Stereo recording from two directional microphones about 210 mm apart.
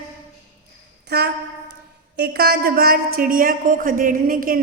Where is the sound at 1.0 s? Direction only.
50° right (ahead or behind).